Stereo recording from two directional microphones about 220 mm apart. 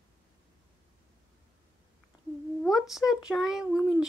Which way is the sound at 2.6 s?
Centre (ahead or behind).